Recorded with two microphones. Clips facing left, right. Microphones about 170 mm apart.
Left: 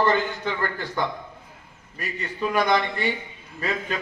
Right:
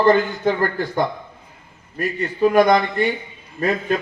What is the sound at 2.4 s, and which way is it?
Speech, 40° right (ahead or behind).